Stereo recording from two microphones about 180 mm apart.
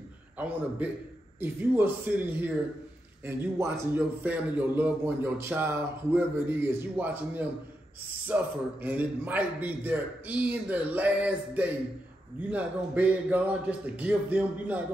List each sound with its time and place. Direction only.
1.4 s a man's voice: 10° right (ahead or behind)